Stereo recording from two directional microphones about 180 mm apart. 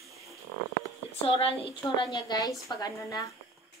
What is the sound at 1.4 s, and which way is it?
A woman's voice, 30° left (ahead or behind).